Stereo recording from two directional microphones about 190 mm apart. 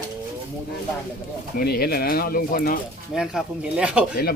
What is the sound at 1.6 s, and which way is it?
Speech, 50° left (ahead or behind).